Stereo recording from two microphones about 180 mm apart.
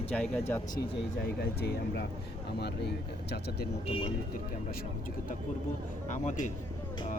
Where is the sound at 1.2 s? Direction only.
60° left (ahead or behind).